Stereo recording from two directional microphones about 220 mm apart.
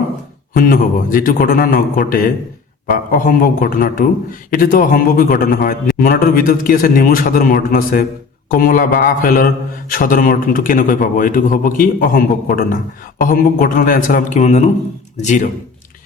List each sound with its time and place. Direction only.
0.5 s a man's voice: 40° left (ahead or behind)